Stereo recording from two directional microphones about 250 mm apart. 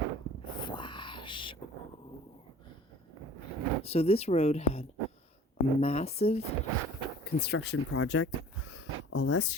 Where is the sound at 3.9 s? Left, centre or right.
Left.